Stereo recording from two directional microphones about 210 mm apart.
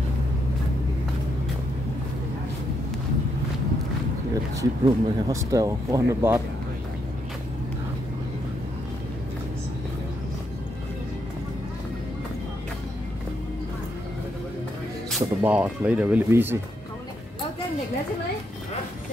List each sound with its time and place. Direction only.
4.6 s speech: 15° right (ahead or behind)
15.0 s speech: 5° right (ahead or behind)